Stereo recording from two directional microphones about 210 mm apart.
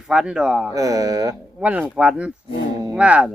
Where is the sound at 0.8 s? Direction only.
15° right (ahead or behind).